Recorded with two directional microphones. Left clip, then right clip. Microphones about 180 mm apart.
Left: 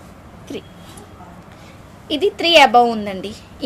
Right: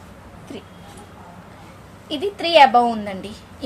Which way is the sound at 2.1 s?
40° left (ahead or behind).